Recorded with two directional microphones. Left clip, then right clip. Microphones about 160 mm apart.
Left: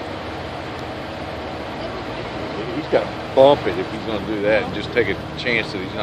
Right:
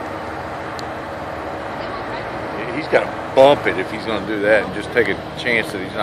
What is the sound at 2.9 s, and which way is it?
Speech, 55° right (ahead or behind).